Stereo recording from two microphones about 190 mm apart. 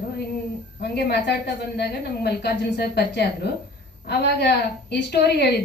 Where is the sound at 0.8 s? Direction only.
60° left (ahead or behind).